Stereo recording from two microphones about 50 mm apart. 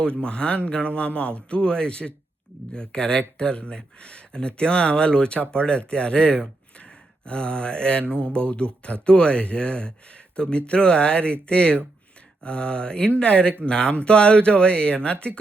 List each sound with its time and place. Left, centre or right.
0.2 s speech: centre